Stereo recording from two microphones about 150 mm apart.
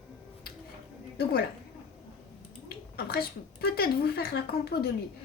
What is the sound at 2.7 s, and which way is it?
Speech, 90° left.